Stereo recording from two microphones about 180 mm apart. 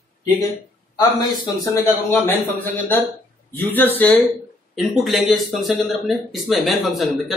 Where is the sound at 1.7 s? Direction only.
10° left (ahead or behind).